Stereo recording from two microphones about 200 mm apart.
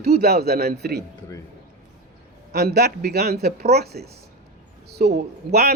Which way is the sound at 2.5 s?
55° right (ahead or behind).